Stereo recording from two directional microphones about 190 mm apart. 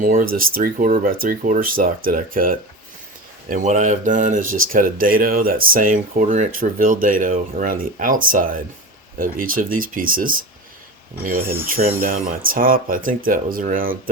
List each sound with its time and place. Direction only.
0.0 s speech: 45° right (ahead or behind)
11.3 s speech: 10° right (ahead or behind)
11.9 s speech: 50° right (ahead or behind)